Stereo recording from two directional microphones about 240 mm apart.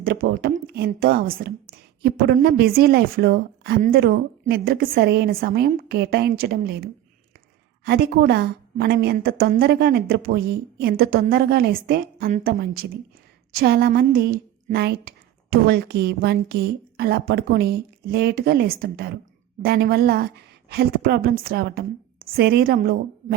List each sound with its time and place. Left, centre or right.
0.0 s a woman's voice: right